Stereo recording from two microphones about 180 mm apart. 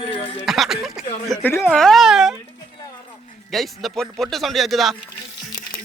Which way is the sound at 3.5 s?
Centre (ahead or behind).